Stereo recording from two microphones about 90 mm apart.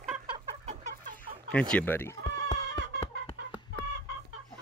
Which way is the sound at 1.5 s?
15° left (ahead or behind).